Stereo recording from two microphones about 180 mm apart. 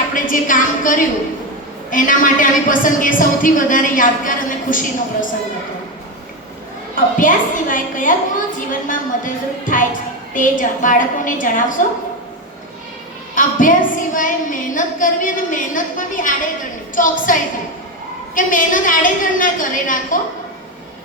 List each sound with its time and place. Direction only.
0.1 s a woman's voice: 45° left (ahead or behind)
6.9 s a woman's voice: 45° left (ahead or behind)
13.3 s a woman's voice: 45° left (ahead or behind)